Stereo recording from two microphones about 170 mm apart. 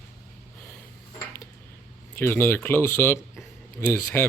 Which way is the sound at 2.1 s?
15° left (ahead or behind).